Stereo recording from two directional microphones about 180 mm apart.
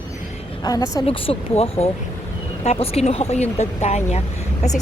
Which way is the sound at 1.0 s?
35° left (ahead or behind).